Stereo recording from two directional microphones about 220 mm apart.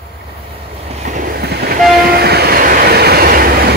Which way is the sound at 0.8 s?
30° right (ahead or behind).